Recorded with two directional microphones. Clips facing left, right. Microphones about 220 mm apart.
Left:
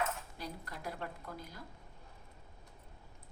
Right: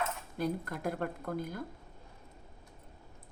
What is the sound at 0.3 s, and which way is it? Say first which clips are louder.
A woman's voice: right 11 dB; 55° right (ahead or behind).